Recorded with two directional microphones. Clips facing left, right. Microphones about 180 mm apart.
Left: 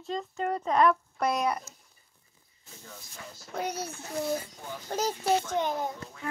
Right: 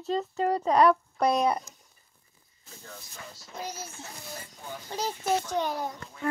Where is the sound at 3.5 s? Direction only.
60° left (ahead or behind).